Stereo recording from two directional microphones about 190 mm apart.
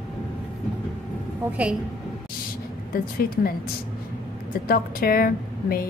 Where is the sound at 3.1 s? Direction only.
50° left (ahead or behind).